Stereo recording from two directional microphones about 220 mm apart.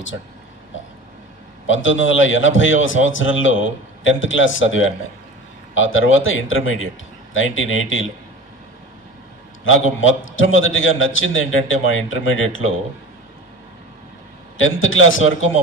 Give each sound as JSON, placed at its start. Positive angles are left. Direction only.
{"t": 1.7, "sound": "a man's voice", "side_deg": 60}
{"t": 9.9, "sound": "a man's voice", "side_deg": 65}
{"t": 14.6, "sound": "a man's voice", "side_deg": 65}